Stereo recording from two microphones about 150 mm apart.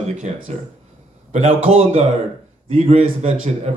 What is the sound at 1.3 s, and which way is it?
Speech, 45° right (ahead or behind).